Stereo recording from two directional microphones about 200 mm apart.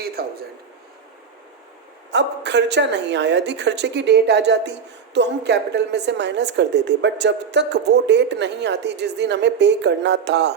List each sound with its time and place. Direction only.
0.0 s a man's voice: 50° right (ahead or behind)
2.0 s a woman's voice: 60° right (ahead or behind)